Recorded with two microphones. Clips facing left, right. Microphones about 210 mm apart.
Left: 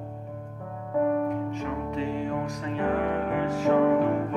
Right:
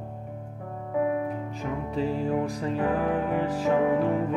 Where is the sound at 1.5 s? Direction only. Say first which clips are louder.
Left 1 dB; 35° right (ahead or behind).